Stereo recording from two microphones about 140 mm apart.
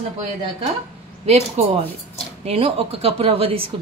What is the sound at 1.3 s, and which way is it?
Speech, 50° right (ahead or behind).